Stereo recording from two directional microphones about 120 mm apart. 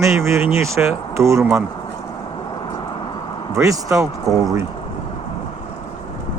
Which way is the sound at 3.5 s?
25° right (ahead or behind).